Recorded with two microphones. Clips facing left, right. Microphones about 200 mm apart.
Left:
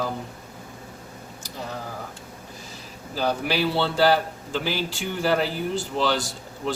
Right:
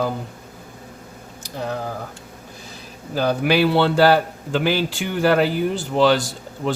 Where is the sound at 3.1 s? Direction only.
60° right (ahead or behind).